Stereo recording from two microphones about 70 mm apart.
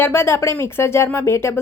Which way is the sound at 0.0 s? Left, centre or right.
Left.